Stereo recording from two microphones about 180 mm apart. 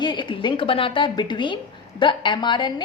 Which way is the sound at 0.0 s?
25° left (ahead or behind).